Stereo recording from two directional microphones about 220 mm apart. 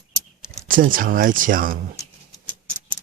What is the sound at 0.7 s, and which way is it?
Speech, 40° right (ahead or behind).